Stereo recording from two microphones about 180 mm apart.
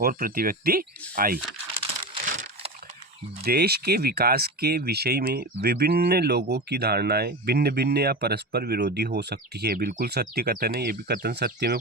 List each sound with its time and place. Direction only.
0.0 s speech: 55° right (ahead or behind)
2.2 s a sound: 50° right (ahead or behind)
3.4 s speech: 60° right (ahead or behind)